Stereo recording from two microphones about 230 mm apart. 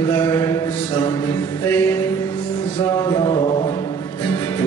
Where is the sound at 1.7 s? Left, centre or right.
Centre.